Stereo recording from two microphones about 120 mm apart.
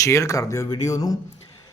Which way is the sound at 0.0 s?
25° left (ahead or behind).